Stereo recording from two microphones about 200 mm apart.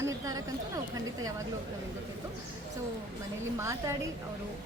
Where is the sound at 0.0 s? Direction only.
15° right (ahead or behind).